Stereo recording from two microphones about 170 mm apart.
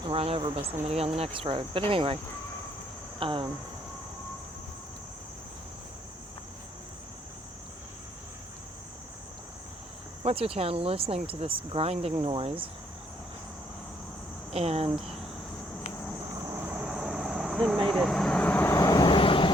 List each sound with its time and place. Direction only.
0.0 s speech: 35° right (ahead or behind)
3.2 s speech: 30° right (ahead or behind)
10.2 s speech: 35° right (ahead or behind)
14.5 s speech: 35° right (ahead or behind)
14.8 s cricket: 5° right (ahead or behind)
16.5 s vehicle: 10° right (ahead or behind); by 19.5 s 30° left (ahead or behind)